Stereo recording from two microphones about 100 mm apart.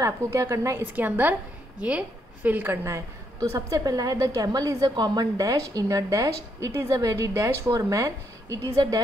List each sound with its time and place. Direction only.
0.0 s a woman's voice: 30° right (ahead or behind)
0.9 s a woman's voice: 15° right (ahead or behind); by 9.0 s 35° right (ahead or behind)